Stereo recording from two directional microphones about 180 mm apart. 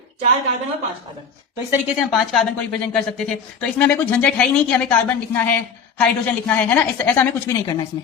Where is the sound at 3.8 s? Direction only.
10° left (ahead or behind).